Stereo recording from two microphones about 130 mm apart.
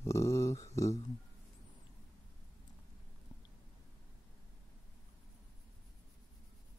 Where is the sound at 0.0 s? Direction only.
20° left (ahead or behind).